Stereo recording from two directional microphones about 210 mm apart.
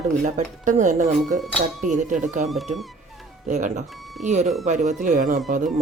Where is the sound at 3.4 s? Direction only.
35° right (ahead or behind).